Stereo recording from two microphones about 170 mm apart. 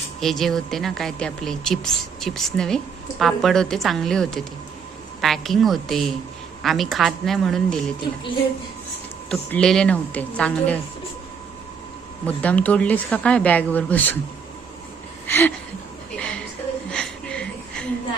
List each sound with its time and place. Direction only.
0.2 s speech: centre (ahead or behind)
9.3 s a woman's voice: 5° left (ahead or behind)
12.2 s a woman's voice: 10° left (ahead or behind)
15.3 s a woman's voice: 10° left (ahead or behind)
16.1 s a sound: 5° left (ahead or behind)